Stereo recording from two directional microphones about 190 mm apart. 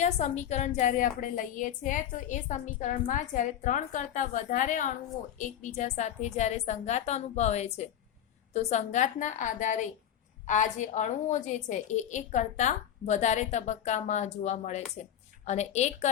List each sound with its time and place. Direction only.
0.0 s a woman's voice: 40° left (ahead or behind)